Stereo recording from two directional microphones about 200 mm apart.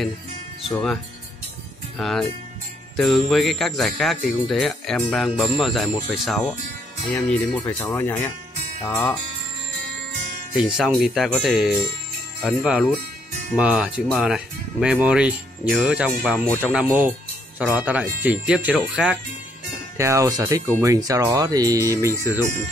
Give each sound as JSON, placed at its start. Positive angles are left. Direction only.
{"t": 2.0, "sound": "speech", "side_deg": 0}
{"t": 10.5, "sound": "speech", "side_deg": 0}
{"t": 20.0, "sound": "speech", "side_deg": -15}